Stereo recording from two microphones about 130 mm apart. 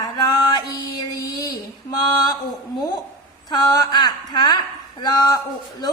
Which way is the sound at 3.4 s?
30° left (ahead or behind).